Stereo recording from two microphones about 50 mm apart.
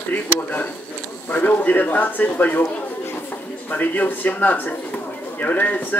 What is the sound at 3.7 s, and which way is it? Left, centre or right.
Speech, left.